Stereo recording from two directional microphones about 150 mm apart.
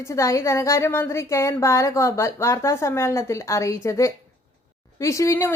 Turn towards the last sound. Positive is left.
turn(degrees=20)  # may be behind; listen again after turning